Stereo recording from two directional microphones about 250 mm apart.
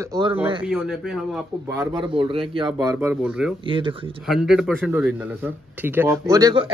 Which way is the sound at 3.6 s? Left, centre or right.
Right.